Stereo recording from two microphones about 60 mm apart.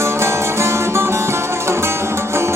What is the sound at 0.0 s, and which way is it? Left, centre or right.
Music, right.